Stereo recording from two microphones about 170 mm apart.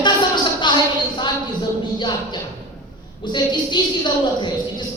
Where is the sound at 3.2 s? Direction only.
25° left (ahead or behind).